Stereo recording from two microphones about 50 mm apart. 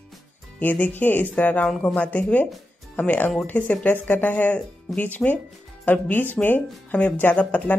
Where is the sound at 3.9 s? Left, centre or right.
Left.